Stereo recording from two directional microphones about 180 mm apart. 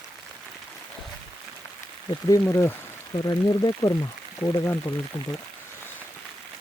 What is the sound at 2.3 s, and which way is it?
Speech, 15° left (ahead or behind).